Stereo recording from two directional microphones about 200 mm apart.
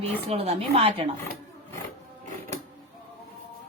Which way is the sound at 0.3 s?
30° right (ahead or behind).